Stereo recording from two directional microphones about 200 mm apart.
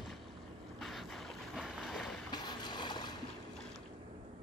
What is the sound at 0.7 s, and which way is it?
Boat, centre (ahead or behind).